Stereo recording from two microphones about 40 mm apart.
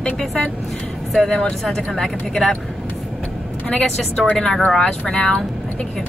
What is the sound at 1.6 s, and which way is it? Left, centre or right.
Speech, centre.